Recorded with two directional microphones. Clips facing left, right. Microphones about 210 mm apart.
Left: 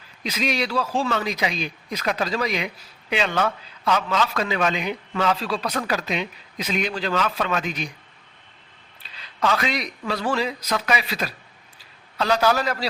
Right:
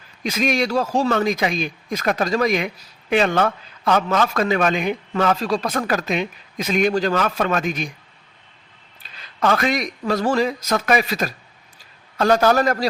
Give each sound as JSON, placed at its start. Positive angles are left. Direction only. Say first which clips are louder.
{"t": 0.2, "sound": "a man's voice", "louder": "right 5 dB", "side_deg": -50}
{"t": 9.0, "sound": "a man's voice", "louder": "right 3 dB", "side_deg": -50}